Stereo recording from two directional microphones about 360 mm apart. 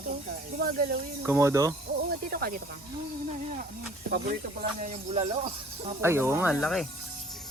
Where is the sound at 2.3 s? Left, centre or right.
Right.